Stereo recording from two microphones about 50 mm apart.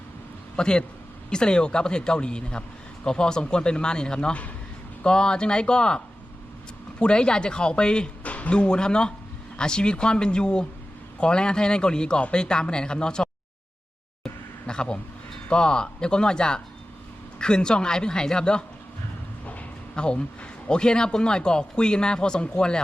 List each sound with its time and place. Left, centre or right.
0.5 s speech: centre
7.0 s speech: centre
14.7 s speech: centre
20.0 s speech: centre